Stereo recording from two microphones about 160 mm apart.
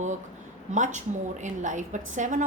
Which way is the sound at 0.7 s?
50° right (ahead or behind).